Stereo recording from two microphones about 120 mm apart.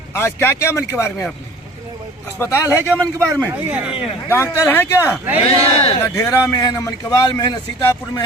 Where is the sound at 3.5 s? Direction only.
15° right (ahead or behind).